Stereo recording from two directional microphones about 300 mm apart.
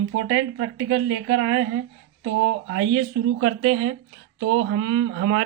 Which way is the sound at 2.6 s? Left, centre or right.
Right.